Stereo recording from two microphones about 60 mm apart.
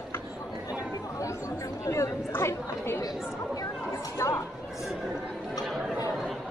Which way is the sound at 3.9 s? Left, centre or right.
Left.